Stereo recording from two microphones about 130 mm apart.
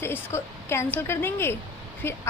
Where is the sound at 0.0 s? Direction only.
20° left (ahead or behind).